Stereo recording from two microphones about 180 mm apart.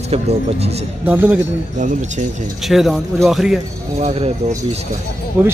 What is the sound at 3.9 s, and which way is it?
Speech, 35° right (ahead or behind).